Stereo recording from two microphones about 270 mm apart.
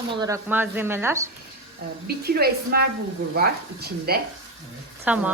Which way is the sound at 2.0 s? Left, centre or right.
Right.